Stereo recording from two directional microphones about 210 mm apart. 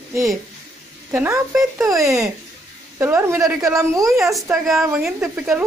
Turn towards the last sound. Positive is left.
turn(degrees=-5)  # may be behind; listen again after turning